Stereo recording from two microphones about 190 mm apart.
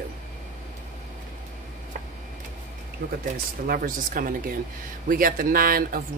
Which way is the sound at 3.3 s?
50° right (ahead or behind).